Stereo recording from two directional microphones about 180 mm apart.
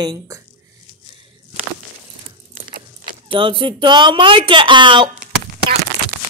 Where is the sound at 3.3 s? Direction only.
30° right (ahead or behind).